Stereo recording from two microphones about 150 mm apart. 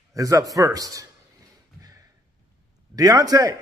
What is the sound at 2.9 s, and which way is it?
Speech, 25° right (ahead or behind).